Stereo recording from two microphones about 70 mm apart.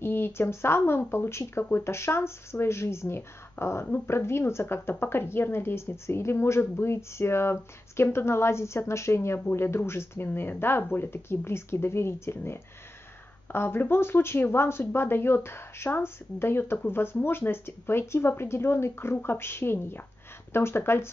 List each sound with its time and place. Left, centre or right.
0.0 s speech: left